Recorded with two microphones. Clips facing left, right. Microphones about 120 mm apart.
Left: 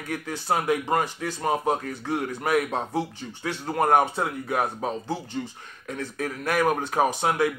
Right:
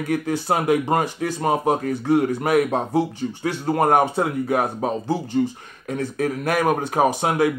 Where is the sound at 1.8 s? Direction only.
50° right (ahead or behind).